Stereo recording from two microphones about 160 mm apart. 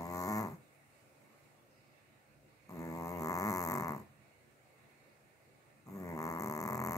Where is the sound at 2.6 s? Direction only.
20° left (ahead or behind).